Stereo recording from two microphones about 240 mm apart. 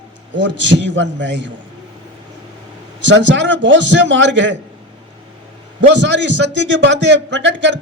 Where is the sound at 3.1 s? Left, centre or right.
Right.